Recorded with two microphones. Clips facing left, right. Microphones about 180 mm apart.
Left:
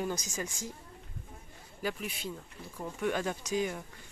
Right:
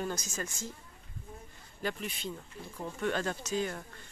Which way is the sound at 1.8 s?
5° left (ahead or behind).